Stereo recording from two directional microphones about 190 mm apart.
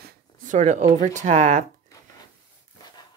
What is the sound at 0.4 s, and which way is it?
Speech, 40° right (ahead or behind).